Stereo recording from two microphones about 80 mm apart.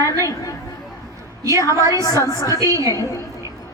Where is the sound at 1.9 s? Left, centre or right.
Left.